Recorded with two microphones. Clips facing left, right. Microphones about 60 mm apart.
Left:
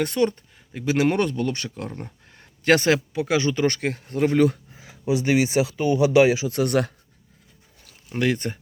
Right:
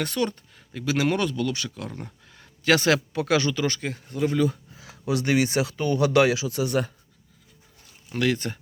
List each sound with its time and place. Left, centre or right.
0.0 s speech: left
2.3 s a sound: left
3.1 s speech: centre
3.5 s speech: left
3.8 s speech: left
4.7 s a sound: left
5.1 s speech: centre
6.5 s speech: left
8.1 s speech: left